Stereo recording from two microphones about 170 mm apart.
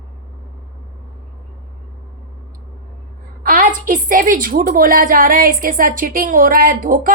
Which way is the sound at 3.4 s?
55° right (ahead or behind).